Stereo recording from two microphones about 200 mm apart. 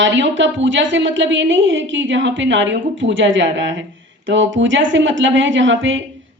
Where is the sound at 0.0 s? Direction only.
65° right (ahead or behind).